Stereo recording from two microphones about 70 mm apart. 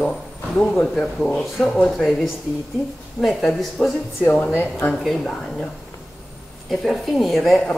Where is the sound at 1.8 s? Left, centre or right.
Centre.